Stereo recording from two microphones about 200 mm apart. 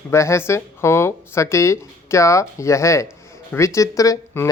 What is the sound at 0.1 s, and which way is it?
Speech, 15° left (ahead or behind).